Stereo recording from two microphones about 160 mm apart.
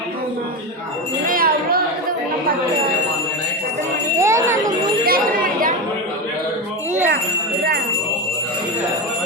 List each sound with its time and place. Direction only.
1.3 s wind chime: 65° right (ahead or behind)
4.2 s jingle bell: 20° right (ahead or behind)
5.0 s chatter: 65° right (ahead or behind)